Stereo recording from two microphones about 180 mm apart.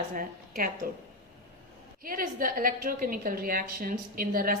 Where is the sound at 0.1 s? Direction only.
50° right (ahead or behind).